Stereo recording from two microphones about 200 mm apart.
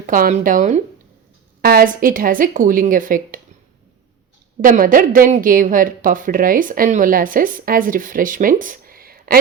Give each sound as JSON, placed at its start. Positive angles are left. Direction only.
{"t": 0.0, "sound": "speech", "side_deg": -45}
{"t": 4.6, "sound": "speech", "side_deg": -45}